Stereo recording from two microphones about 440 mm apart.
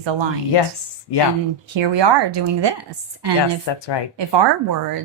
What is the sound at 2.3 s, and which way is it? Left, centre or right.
Speech, right.